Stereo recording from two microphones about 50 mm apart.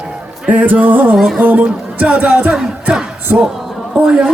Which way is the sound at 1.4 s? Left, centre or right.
Right.